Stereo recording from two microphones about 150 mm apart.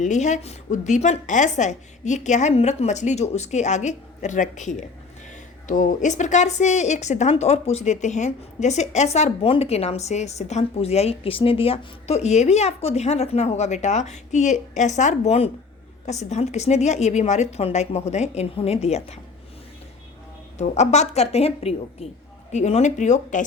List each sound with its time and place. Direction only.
0.0 s a woman's voice: 55° left (ahead or behind)
20.6 s a woman's voice: 50° left (ahead or behind)